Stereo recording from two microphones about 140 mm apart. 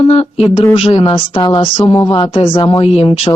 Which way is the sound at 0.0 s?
45° left (ahead or behind).